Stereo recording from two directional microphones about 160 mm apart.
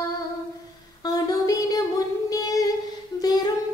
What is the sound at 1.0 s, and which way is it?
Child singing, 20° left (ahead or behind).